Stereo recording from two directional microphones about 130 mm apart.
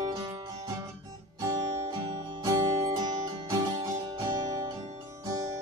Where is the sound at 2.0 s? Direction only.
30° right (ahead or behind).